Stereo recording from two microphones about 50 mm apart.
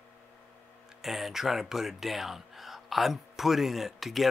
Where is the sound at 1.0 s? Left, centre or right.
Centre.